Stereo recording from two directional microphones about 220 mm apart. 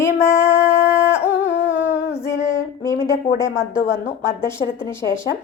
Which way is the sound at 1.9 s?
15° left (ahead or behind).